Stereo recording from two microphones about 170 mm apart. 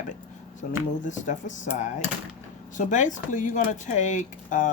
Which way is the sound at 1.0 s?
45° left (ahead or behind).